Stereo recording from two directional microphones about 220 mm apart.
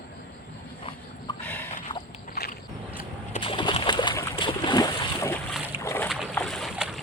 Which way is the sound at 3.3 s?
25° left (ahead or behind).